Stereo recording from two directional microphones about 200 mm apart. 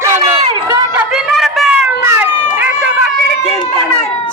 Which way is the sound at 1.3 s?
Centre (ahead or behind).